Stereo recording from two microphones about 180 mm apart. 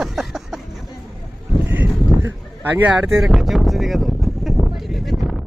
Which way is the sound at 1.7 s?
10° right (ahead or behind).